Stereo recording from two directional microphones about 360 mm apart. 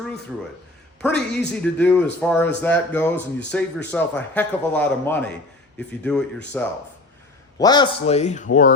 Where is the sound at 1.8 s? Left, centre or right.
Centre.